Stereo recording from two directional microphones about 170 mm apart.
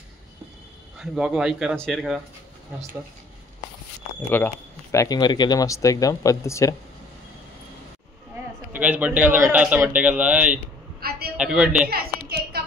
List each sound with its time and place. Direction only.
0.9 s speech: centre (ahead or behind)
4.3 s speech: 10° left (ahead or behind)
8.7 s a man's voice: 10° right (ahead or behind)
11.0 s a sound: 65° right (ahead or behind)
11.3 s speech: 5° right (ahead or behind)
11.9 s a sound: 65° right (ahead or behind)